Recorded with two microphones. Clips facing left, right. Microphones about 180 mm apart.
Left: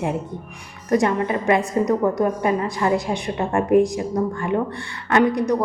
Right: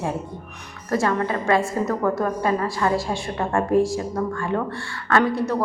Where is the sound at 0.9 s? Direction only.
20° left (ahead or behind).